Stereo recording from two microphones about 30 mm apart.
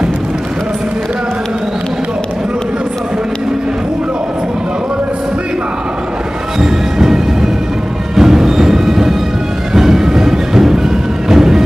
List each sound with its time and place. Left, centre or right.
6.6 s music: centre